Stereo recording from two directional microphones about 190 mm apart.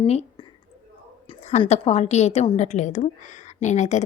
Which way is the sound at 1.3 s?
35° left (ahead or behind).